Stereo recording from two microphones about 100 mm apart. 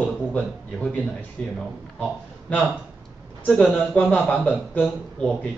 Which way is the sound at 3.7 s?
15° left (ahead or behind).